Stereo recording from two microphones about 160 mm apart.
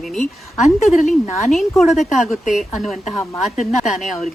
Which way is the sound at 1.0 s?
50° left (ahead or behind).